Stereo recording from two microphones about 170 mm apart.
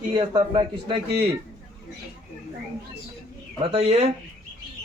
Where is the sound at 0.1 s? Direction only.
25° right (ahead or behind).